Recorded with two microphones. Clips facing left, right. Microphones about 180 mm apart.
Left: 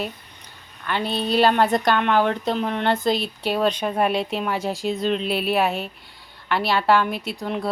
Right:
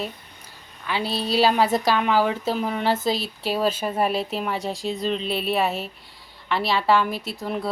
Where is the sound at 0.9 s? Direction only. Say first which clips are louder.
Left 2 dB; centre (ahead or behind).